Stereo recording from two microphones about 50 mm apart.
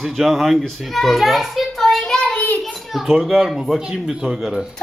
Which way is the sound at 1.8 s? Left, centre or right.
Centre.